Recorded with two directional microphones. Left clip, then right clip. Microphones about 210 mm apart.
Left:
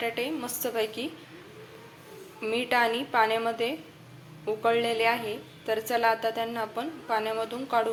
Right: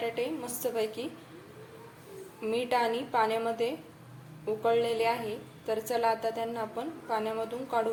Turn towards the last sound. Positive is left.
turn(degrees=0)  # may be behind; listen again after turning